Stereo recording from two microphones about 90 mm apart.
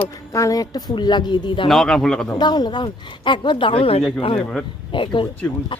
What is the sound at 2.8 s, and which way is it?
Speech, 65° left (ahead or behind).